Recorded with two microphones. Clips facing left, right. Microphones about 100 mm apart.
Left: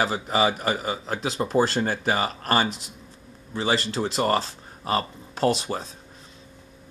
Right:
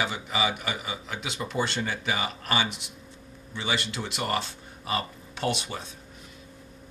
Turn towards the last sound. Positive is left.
turn(degrees=35)  # may be behind; listen again after turning